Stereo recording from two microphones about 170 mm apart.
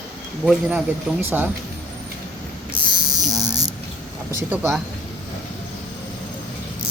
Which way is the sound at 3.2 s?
20° right (ahead or behind).